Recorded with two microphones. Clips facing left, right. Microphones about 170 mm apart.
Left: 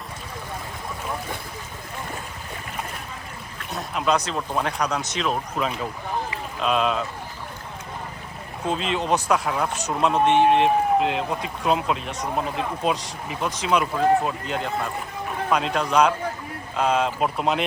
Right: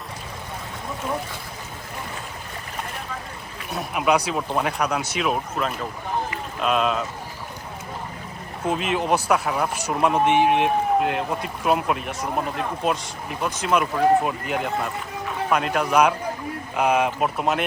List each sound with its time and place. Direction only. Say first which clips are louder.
3.6 s speech: right 2 dB; 10° right (ahead or behind)
8.6 s speech: right 1 dB; 5° right (ahead or behind)